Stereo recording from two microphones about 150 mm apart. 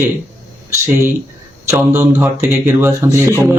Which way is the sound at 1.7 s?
15° right (ahead or behind).